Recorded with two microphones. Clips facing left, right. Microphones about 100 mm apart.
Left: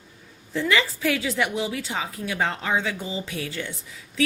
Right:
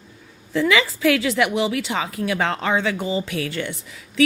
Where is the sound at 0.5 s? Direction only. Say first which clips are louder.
Right 4 dB; 90° right.